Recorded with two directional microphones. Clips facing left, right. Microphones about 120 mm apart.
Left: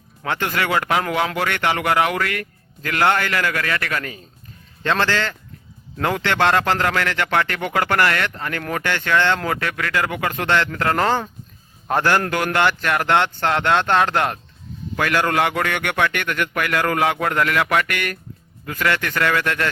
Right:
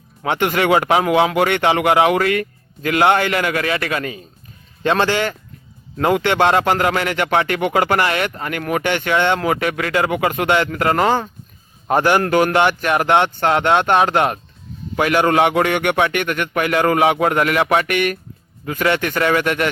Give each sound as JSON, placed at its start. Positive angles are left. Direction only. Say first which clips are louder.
{"t": 0.3, "sound": "speech", "louder": "right 6 dB", "side_deg": -20}